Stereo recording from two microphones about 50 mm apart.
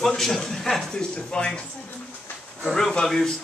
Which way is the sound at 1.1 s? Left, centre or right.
Centre.